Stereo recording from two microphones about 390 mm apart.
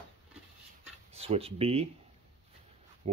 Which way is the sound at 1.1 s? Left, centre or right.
Centre.